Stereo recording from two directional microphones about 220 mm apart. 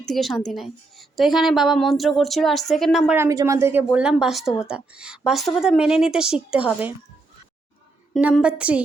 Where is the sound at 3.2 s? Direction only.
15° right (ahead or behind).